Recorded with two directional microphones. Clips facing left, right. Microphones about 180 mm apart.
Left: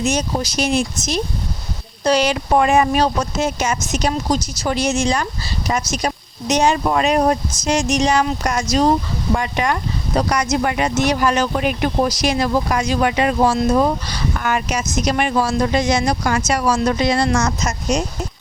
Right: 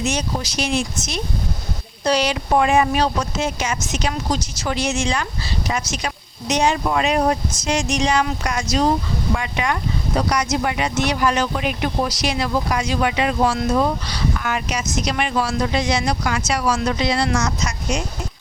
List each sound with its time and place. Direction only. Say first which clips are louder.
0.0 s speech: left 3 dB; 40° left (ahead or behind)